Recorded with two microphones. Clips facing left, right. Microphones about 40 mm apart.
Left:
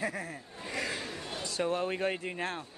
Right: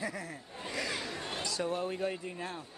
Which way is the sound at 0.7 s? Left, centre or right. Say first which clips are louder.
Left 1 dB; left.